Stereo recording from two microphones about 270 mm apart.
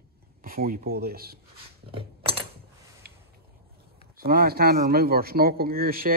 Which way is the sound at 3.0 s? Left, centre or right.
Right.